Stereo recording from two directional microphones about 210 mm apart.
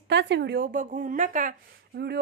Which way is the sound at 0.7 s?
35° right (ahead or behind).